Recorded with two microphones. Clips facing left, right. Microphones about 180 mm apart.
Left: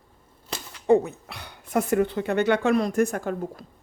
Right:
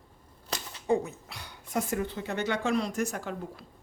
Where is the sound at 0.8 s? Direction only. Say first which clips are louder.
Left 8 dB; 65° left (ahead or behind).